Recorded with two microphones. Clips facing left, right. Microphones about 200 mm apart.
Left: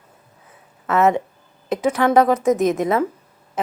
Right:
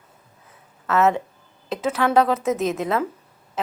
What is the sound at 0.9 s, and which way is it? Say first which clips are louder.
Speech: left 2 dB; 15° left (ahead or behind).